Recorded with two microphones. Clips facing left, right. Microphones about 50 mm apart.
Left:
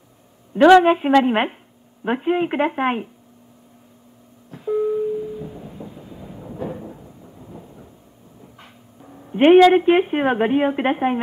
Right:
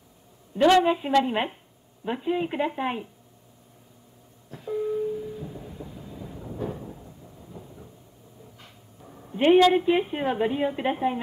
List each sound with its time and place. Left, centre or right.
0.7 s a woman's voice: left
4.5 s a sound: centre
9.3 s a woman's voice: left